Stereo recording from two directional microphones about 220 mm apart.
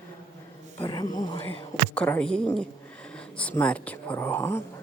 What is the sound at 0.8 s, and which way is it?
Speech, 20° left (ahead or behind).